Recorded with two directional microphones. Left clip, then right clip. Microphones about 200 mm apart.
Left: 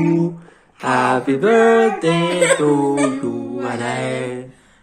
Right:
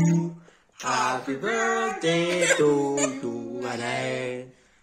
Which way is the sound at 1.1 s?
30° left (ahead or behind).